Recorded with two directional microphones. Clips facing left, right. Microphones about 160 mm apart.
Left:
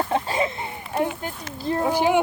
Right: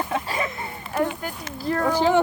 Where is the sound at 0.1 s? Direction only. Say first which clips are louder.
Left 3 dB; 25° left (ahead or behind).